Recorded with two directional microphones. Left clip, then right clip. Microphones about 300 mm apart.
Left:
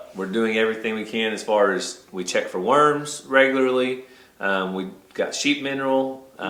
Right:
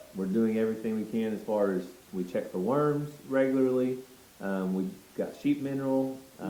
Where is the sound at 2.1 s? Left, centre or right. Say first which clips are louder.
Left 8 dB; left.